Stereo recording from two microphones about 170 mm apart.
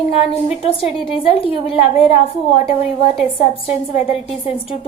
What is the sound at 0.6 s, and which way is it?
A woman's voice, 35° left (ahead or behind).